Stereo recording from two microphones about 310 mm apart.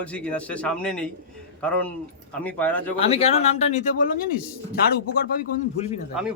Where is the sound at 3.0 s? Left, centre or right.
Centre.